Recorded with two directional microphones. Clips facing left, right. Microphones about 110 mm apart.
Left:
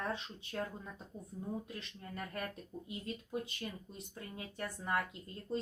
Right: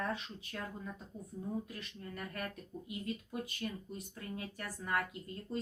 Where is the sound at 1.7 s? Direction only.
25° left (ahead or behind).